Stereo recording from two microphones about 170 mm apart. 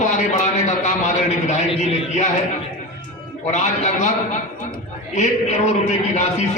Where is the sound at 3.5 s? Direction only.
45° left (ahead or behind).